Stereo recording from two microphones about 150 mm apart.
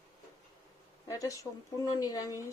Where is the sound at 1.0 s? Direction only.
20° left (ahead or behind).